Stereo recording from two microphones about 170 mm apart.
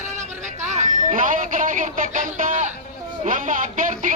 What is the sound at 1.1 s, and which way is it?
Speech, 50° right (ahead or behind).